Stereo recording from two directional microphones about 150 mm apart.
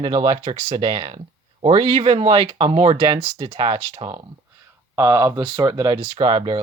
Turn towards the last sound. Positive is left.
turn(degrees=-35)  # may be behind; listen again after turning